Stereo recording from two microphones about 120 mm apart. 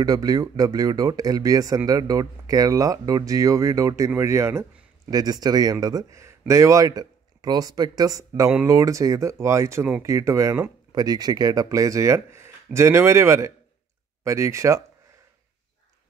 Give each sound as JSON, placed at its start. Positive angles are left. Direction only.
{"t": 0.0, "sound": "speech", "side_deg": -30}
{"t": 5.1, "sound": "speech", "side_deg": -35}